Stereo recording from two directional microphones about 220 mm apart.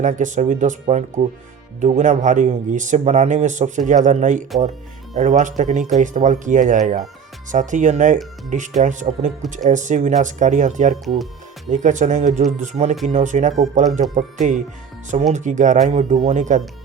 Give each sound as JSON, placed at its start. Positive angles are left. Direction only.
{"t": 0.0, "sound": "speech", "side_deg": -35}